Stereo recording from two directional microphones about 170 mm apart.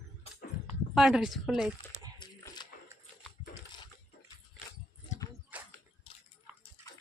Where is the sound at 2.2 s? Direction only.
25° left (ahead or behind).